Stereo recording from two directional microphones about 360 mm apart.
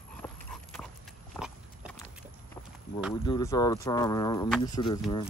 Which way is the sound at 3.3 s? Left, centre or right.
Centre.